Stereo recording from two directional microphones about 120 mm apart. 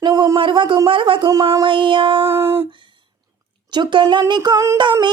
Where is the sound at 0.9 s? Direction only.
45° right (ahead or behind).